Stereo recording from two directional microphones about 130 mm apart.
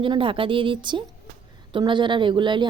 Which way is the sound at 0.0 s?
40° right (ahead or behind).